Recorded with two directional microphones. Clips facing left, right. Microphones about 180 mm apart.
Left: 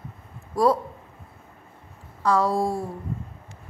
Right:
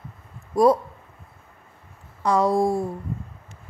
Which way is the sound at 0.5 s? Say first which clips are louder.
Right 3 dB; 20° right (ahead or behind).